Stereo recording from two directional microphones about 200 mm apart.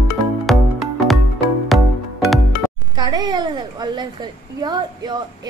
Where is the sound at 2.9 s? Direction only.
20° right (ahead or behind).